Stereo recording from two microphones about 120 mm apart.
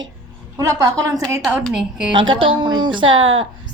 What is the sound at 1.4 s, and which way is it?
Speech, centre (ahead or behind).